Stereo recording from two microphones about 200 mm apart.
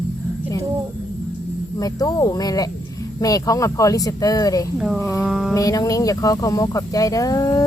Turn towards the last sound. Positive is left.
turn(degrees=15)  # may be behind; listen again after turning